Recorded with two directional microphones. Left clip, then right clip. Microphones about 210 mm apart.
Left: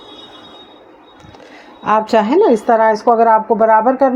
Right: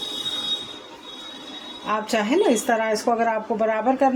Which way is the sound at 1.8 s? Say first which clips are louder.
Left 11 dB; 35° left (ahead or behind).